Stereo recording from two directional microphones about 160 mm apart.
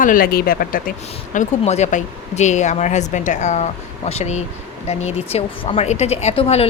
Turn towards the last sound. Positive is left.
turn(degrees=40)  # may be behind; listen again after turning